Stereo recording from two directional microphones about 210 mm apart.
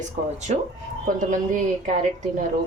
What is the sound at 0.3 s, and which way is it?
Speech, 35° right (ahead or behind).